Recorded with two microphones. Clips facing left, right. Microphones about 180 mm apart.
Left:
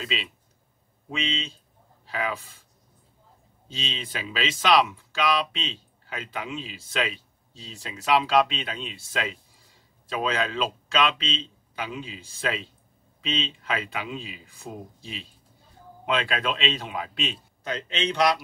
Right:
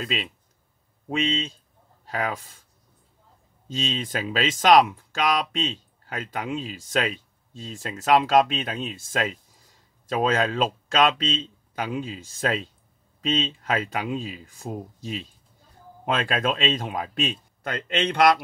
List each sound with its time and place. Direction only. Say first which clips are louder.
0.0 s a man's voice: right 3 dB; 55° right (ahead or behind)
3.6 s a man's voice: right 7 dB; 45° right (ahead or behind)